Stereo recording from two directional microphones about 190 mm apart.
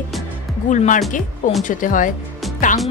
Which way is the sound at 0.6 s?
40° left (ahead or behind).